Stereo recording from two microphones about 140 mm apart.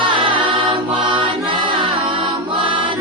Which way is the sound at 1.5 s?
35° right (ahead or behind).